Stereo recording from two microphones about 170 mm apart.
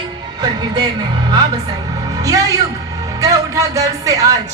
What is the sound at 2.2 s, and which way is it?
A man's voice, 20° right (ahead or behind).